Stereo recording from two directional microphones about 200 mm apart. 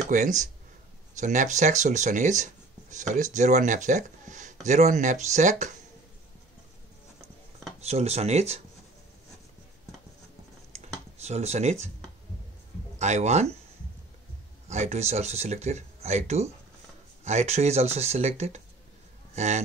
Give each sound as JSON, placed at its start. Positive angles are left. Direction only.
{"t": 0.1, "sound": "speech", "side_deg": -40}
{"t": 7.8, "sound": "speech", "side_deg": -35}
{"t": 10.7, "sound": "computer keyboard", "side_deg": -35}
{"t": 13.0, "sound": "speech", "side_deg": -35}
{"t": 14.7, "sound": "speech", "side_deg": -35}